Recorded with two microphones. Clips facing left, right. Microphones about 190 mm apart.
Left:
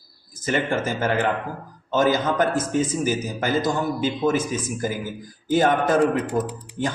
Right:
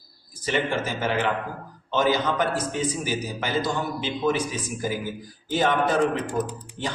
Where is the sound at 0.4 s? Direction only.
45° left (ahead or behind).